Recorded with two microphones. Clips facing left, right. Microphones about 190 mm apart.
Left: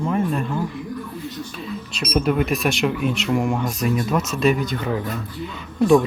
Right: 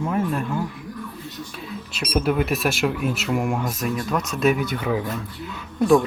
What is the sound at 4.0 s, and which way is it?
Speech, 5° left (ahead or behind).